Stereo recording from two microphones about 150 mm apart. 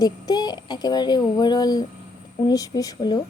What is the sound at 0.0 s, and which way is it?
Speech, 25° left (ahead or behind).